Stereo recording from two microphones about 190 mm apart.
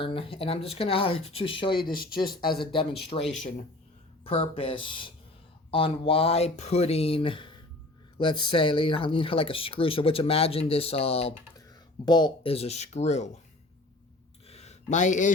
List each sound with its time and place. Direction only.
0.0 s speech: 30° left (ahead or behind)
4.2 s speech: 30° left (ahead or behind)
14.4 s a sound: 35° left (ahead or behind)